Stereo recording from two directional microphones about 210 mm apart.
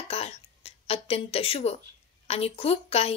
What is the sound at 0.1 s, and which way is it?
A woman's voice, 30° left (ahead or behind).